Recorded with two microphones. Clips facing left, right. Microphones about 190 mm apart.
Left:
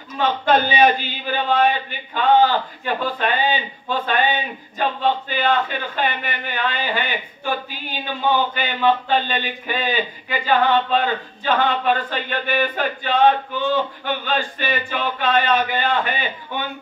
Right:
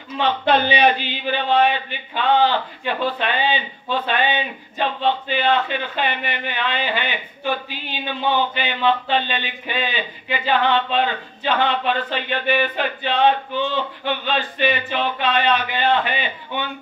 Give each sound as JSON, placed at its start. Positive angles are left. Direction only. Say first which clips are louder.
{"t": 0.2, "sound": "a man's voice", "louder": "even", "side_deg": 45}